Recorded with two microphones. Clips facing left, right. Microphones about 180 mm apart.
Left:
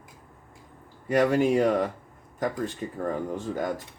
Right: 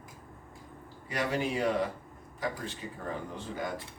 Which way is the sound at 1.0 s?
50° left (ahead or behind).